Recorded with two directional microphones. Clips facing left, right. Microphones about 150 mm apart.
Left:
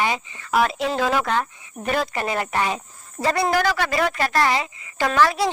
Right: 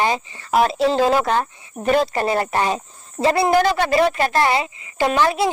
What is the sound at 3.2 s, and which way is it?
A woman's voice, 25° right (ahead or behind).